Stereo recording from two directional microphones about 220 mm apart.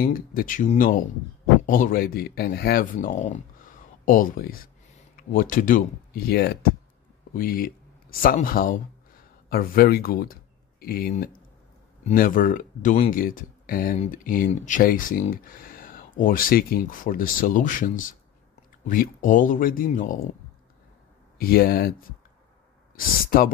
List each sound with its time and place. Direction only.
0.0 s speech: 40° left (ahead or behind)
21.4 s speech: 45° left (ahead or behind)
22.9 s speech: 40° left (ahead or behind)